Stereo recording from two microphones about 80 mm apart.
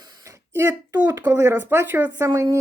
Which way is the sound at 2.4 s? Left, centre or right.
Right.